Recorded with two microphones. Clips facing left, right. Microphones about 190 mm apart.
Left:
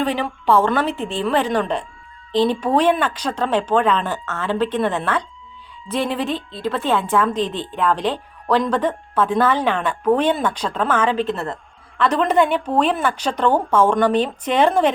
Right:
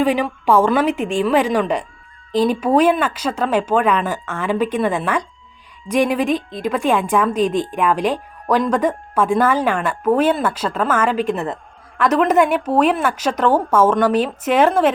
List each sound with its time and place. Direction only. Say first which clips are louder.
0.0 s a woman's voice: right 4 dB; 10° right (ahead or behind)
12.0 s a woman's voice: right 2 dB; 5° right (ahead or behind)